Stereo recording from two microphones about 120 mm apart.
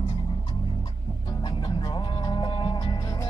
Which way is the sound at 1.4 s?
40° left (ahead or behind).